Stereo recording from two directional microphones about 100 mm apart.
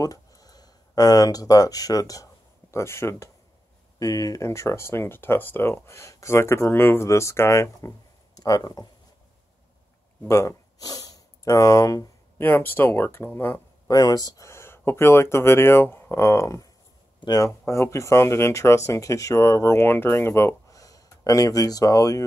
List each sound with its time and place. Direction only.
0.0 s speech: 35° left (ahead or behind)
2.7 s speech: 25° left (ahead or behind)
4.0 s speech: 35° left (ahead or behind)
10.2 s speech: 30° left (ahead or behind)
12.4 s speech: 20° left (ahead or behind)
13.8 s speech: 40° left (ahead or behind)
17.2 s speech: 45° left (ahead or behind)
17.6 s speech: 30° left (ahead or behind)